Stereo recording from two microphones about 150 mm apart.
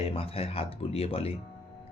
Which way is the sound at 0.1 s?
40° left (ahead or behind).